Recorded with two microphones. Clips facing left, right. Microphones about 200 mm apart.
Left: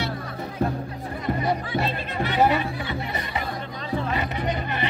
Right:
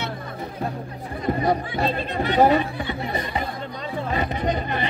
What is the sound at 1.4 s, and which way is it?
Speech, 40° right (ahead or behind).